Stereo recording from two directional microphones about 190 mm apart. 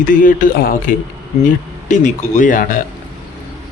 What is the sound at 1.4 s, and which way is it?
Speech, 40° left (ahead or behind).